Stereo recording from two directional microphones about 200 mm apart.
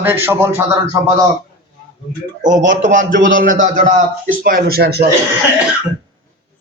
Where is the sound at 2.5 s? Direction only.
65° right (ahead or behind).